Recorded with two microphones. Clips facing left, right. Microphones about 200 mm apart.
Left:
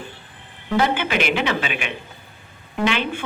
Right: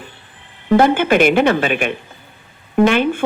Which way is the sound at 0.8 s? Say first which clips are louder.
Right 7 dB; 50° right (ahead or behind).